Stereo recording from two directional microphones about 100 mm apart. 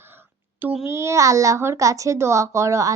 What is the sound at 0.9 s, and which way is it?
A woman's voice, 30° right (ahead or behind).